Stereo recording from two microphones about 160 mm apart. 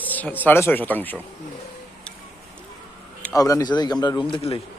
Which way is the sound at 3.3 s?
20° left (ahead or behind).